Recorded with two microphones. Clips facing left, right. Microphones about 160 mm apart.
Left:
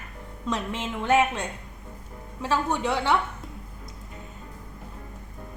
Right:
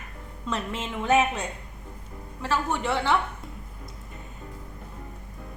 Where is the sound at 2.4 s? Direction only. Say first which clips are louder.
Left 2 dB; 15° left (ahead or behind).